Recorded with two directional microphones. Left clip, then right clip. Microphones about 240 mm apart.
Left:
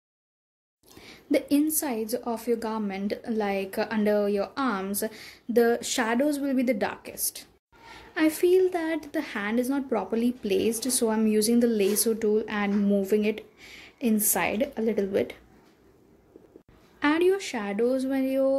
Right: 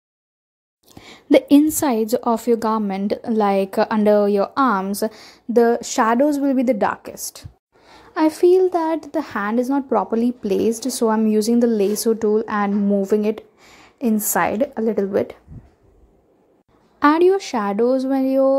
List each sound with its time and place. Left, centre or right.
0.9 s a woman's voice: right
17.0 s a woman's voice: right